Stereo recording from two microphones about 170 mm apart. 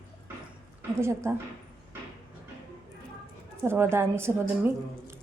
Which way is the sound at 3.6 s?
15° right (ahead or behind).